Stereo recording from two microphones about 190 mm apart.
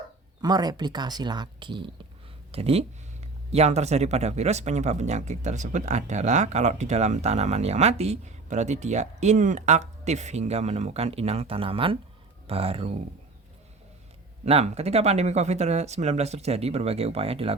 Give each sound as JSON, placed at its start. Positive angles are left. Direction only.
{"t": 0.4, "sound": "speech", "side_deg": -20}
{"t": 14.4, "sound": "speech", "side_deg": -35}